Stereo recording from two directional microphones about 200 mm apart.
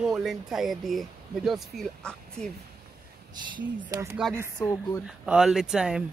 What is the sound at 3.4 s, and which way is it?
Speech, 20° right (ahead or behind).